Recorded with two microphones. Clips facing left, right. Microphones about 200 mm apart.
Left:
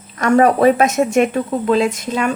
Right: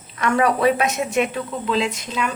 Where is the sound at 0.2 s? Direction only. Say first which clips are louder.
Left 6 dB; 40° left (ahead or behind).